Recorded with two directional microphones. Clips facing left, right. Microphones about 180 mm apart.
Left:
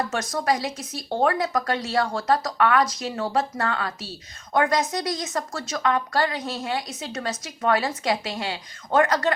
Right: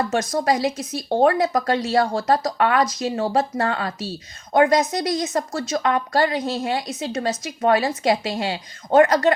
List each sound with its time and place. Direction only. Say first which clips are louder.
0.1 s a woman's voice: right 4 dB; 20° right (ahead or behind)